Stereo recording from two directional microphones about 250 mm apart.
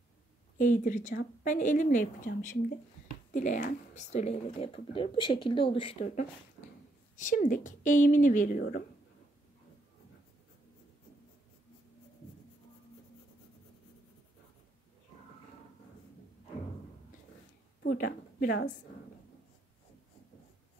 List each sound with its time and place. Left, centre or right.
0.6 s a woman's voice: left
17.9 s a woman's voice: left